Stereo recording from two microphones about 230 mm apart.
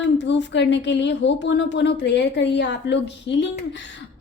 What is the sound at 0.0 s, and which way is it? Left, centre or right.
A woman's voice, left.